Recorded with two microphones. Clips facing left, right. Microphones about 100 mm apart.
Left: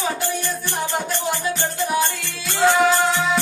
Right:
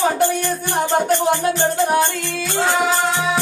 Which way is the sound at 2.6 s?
Centre (ahead or behind).